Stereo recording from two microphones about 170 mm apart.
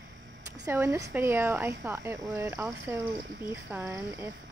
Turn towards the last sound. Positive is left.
turn(degrees=-15)  # may be behind; listen again after turning